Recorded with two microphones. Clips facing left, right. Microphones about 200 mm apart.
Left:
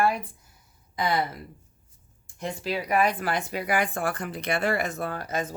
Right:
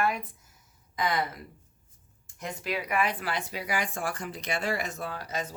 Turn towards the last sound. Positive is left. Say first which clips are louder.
# left 5 dB
turn(degrees=55)  # may be behind; listen again after turning